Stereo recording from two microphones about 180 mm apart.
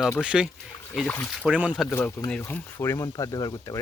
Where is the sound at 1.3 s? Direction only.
5° right (ahead or behind).